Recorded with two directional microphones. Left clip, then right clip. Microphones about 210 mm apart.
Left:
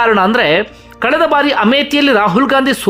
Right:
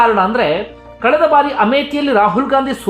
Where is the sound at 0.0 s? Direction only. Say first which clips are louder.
Left 1 dB; 25° left (ahead or behind).